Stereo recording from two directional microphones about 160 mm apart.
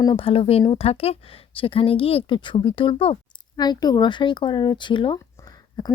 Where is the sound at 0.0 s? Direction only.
30° left (ahead or behind).